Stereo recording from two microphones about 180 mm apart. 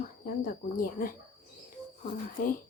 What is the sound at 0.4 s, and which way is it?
Speech, 50° left (ahead or behind).